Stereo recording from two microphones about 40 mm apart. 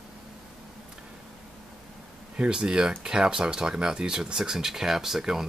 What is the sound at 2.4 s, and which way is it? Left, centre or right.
Speech, right.